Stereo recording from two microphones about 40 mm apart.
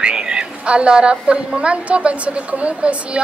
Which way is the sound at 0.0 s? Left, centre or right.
Right.